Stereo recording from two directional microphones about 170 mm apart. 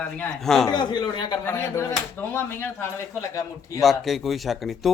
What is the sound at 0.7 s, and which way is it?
Speech, 25° left (ahead or behind).